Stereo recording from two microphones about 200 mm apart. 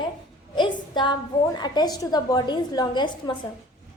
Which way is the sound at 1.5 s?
20° left (ahead or behind).